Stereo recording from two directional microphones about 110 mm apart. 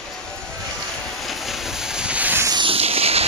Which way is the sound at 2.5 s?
55° right (ahead or behind).